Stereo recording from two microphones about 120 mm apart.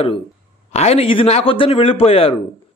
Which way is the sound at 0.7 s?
65° left (ahead or behind).